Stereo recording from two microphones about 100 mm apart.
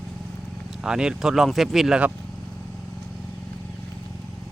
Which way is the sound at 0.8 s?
5° right (ahead or behind).